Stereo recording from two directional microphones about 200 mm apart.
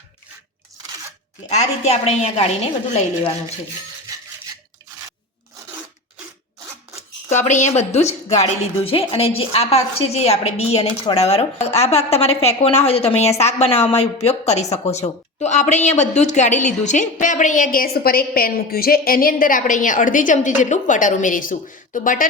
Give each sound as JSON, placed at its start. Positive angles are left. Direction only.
{"t": 1.5, "sound": "speech", "side_deg": 35}
{"t": 7.3, "sound": "speech", "side_deg": 35}